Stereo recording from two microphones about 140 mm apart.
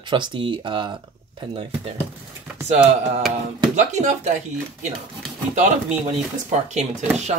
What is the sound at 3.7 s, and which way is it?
Speech, 60° right (ahead or behind).